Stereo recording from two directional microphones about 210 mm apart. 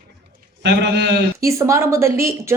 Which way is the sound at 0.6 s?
55° right (ahead or behind).